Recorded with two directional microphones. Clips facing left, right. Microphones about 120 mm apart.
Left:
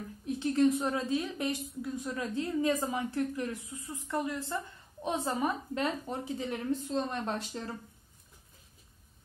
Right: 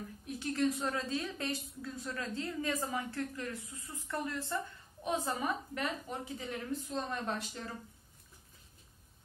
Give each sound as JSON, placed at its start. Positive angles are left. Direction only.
{"t": 0.4, "sound": "a woman's voice", "side_deg": 25}